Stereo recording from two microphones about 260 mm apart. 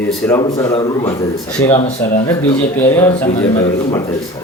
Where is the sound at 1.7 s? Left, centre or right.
Left.